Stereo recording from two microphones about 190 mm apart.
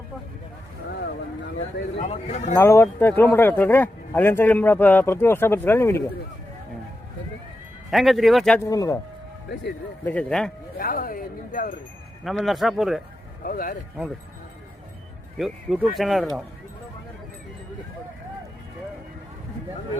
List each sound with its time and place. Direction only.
1.5 s speech: 35° left (ahead or behind)
2.6 s speech: 15° left (ahead or behind)
7.9 s speech: centre (ahead or behind)
8.6 s speech: 20° left (ahead or behind)
10.1 s speech: 5° left (ahead or behind)
10.8 s speech: 50° left (ahead or behind)
12.2 s speech: centre (ahead or behind)
13.4 s speech: 50° left (ahead or behind)
15.4 s speech: centre (ahead or behind)